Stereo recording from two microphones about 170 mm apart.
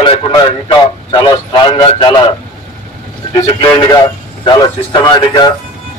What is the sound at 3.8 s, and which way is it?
A man's voice, 25° left (ahead or behind).